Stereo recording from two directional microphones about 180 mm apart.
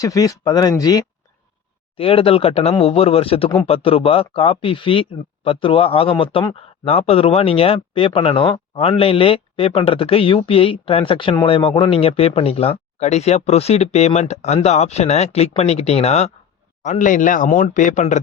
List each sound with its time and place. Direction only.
0.0 s speech: 20° left (ahead or behind)
2.0 s speech: 30° left (ahead or behind)